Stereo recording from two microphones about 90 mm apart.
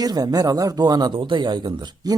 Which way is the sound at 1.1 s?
65° right (ahead or behind).